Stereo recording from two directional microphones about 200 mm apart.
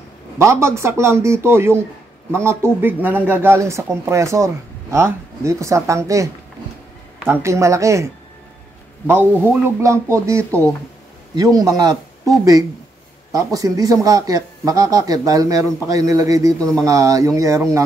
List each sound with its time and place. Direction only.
0.4 s a man's voice: 15° right (ahead or behind)
7.4 s a man's voice: 15° right (ahead or behind)
13.3 s a man's voice: 15° right (ahead or behind)